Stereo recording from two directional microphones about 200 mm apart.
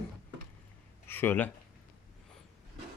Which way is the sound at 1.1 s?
10° left (ahead or behind).